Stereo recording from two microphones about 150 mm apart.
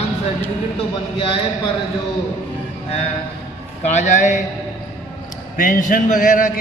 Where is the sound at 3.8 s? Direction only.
50° left (ahead or behind).